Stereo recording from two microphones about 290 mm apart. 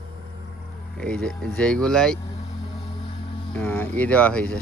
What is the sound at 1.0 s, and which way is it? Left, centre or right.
Speech, centre.